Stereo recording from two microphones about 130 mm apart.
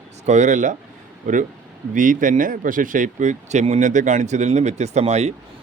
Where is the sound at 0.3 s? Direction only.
65° right (ahead or behind).